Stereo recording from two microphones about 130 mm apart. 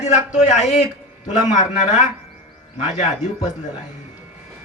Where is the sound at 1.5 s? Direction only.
75° left (ahead or behind).